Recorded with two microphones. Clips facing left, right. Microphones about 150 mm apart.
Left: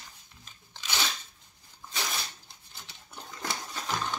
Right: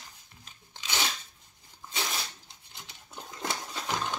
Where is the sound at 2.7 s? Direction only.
15° right (ahead or behind).